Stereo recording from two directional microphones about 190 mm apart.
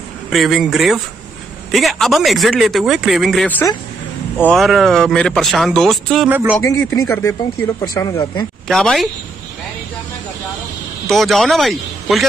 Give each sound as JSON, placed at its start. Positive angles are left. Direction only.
{"t": 0.3, "sound": "speech", "side_deg": 0}
{"t": 6.3, "sound": "speech", "side_deg": -10}
{"t": 6.9, "sound": "speech", "side_deg": 15}
{"t": 8.6, "sound": "speech", "side_deg": 0}
{"t": 11.1, "sound": "a man's voice", "side_deg": 0}